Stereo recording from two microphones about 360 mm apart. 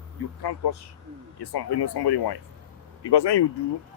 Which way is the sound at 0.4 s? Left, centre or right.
Left.